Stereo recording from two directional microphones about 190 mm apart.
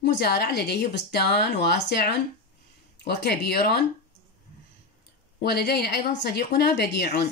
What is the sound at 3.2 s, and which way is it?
Speech, 55° left (ahead or behind).